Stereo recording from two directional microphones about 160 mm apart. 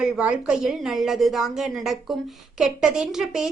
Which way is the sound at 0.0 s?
5° right (ahead or behind).